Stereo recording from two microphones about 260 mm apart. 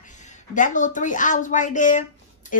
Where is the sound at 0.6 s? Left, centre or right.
Left.